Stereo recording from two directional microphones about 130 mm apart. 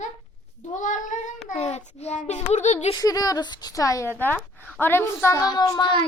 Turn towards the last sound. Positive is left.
turn(degrees=30)  # may be behind; listen again after turning